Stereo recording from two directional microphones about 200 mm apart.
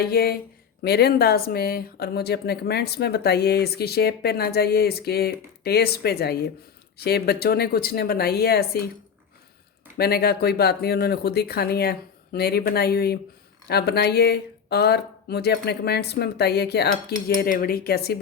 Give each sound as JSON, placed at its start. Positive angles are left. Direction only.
{"t": 0.0, "sound": "speech", "side_deg": 50}
{"t": 10.0, "sound": "speech", "side_deg": 50}